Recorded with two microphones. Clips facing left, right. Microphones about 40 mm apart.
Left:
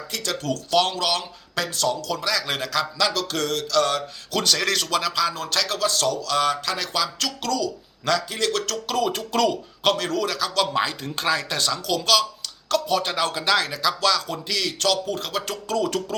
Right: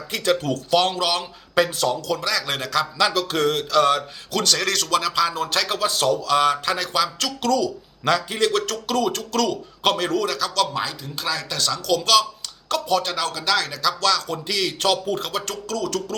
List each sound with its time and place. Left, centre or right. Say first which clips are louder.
0.1 s speech: right 6 dB; right
0.5 s speech: right 2 dB; centre
1.5 s speech: right 4 dB; right
2.0 s speech: right 1 dB; centre
3.0 s speech: right 6 dB; centre
4.3 s speech: even; centre
8.0 s speech: right 3 dB; centre
9.3 s speech: left 2 dB; centre
9.8 s speech: right 1 dB; centre
11.0 s speech: left 3 dB; left
11.6 s speech: right 2 dB; centre
12.6 s a sound: right 1 dB; centre
13.0 s speech: left 1 dB; centre
15.6 s speech: left 2 dB; left